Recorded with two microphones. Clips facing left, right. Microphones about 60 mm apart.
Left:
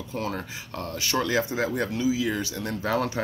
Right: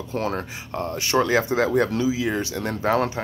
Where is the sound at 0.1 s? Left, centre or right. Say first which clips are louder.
Right 5 dB; right.